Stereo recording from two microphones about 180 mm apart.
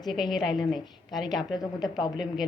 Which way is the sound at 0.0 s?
Centre (ahead or behind).